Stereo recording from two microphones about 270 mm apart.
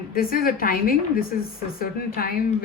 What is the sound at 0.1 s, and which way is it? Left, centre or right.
A woman's voice, left.